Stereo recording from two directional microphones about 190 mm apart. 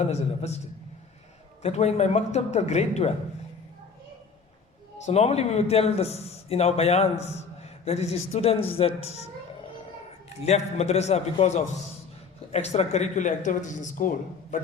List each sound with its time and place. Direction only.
0.0 s a man's voice: 35° left (ahead or behind)
1.6 s a man's voice: 35° left (ahead or behind)
5.0 s a man's voice: 35° left (ahead or behind)